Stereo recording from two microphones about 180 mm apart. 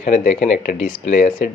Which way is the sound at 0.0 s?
40° left (ahead or behind).